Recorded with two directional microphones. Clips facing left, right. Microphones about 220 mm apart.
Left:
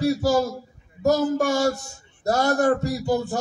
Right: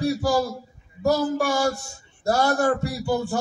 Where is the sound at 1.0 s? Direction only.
20° left (ahead or behind).